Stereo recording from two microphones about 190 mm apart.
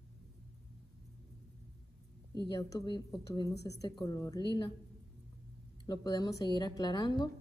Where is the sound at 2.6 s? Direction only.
20° left (ahead or behind).